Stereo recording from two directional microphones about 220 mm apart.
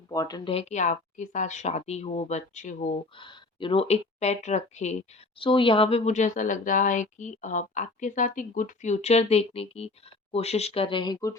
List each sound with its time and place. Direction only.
0.1 s speech: 15° left (ahead or behind); by 2.9 s 35° left (ahead or behind)
3.2 s a woman's voice: 20° left (ahead or behind)